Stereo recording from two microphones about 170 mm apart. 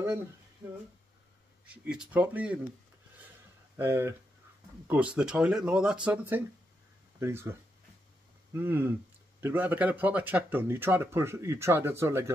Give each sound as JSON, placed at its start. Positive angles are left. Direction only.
{"t": 1.7, "sound": "speech", "side_deg": -5}
{"t": 3.7, "sound": "speech", "side_deg": -15}
{"t": 8.5, "sound": "speech", "side_deg": -15}